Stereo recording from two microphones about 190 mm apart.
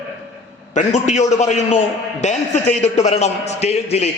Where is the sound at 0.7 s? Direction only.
40° left (ahead or behind).